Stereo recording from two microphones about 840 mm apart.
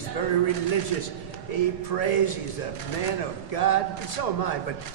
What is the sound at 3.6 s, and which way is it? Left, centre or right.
Speech, left.